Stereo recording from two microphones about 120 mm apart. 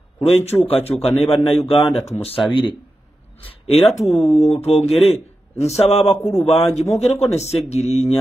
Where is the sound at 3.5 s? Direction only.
55° left (ahead or behind).